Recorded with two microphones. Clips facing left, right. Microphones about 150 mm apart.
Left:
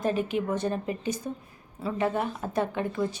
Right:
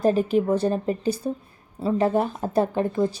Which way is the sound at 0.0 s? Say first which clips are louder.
Right 7 dB; 35° right (ahead or behind).